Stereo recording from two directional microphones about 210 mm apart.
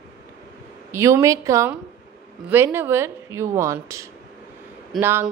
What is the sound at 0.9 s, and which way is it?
Speech, 15° right (ahead or behind).